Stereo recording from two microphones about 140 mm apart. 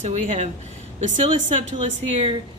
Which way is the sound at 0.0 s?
50° right (ahead or behind).